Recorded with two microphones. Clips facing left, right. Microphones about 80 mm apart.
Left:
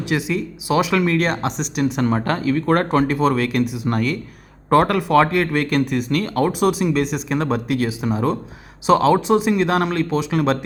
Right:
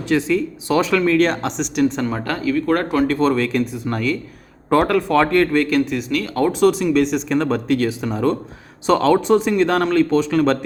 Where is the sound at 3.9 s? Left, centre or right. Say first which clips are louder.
Even; left.